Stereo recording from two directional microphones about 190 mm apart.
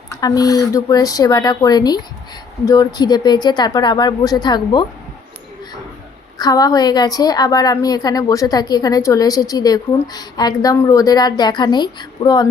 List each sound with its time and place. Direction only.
0.1 s a woman's voice: 20° left (ahead or behind)
6.4 s a woman's voice: 20° left (ahead or behind)